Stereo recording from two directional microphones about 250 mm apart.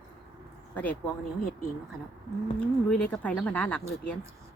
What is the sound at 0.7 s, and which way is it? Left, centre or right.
Speech, centre.